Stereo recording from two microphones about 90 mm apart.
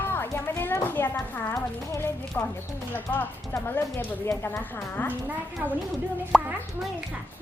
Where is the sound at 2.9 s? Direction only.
20° left (ahead or behind).